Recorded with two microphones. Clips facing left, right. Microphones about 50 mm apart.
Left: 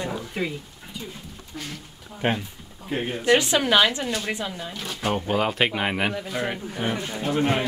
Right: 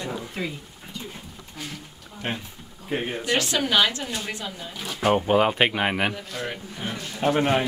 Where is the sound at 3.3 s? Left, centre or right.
Left.